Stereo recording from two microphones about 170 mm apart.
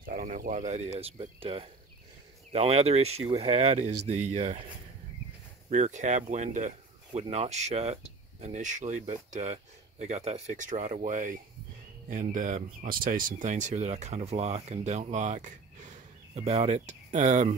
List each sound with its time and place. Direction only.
0.0 s speech: 55° right (ahead or behind)
5.7 s speech: 45° right (ahead or behind)